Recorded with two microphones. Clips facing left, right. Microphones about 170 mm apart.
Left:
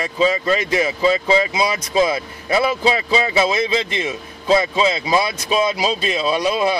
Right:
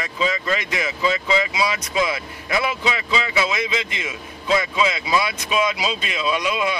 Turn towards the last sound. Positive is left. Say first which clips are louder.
# left 4 dB
turn(degrees=35)  # may be behind; listen again after turning